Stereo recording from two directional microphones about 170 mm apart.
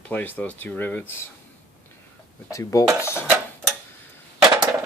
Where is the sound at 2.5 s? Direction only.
20° left (ahead or behind).